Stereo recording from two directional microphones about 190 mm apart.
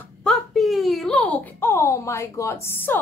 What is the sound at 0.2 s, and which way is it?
A child's voice, centre (ahead or behind).